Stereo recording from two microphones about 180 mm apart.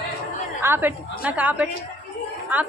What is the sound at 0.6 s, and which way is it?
A woman's voice, 10° right (ahead or behind).